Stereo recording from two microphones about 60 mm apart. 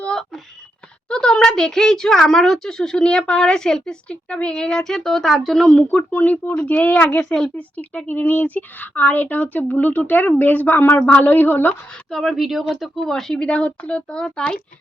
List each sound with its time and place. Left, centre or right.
1.1 s speech: centre
5.9 s speech: left
7.5 s a woman's voice: left
12.1 s speech: centre
13.4 s speech: centre